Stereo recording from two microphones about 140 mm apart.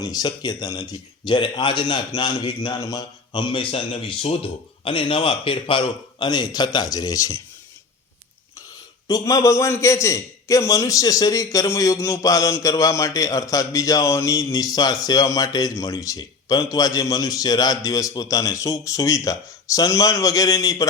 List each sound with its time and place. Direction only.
0.0 s speech: 30° left (ahead or behind)
9.0 s a man's voice: 25° left (ahead or behind)